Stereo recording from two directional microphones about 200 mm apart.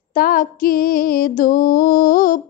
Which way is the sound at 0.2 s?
45° left (ahead or behind).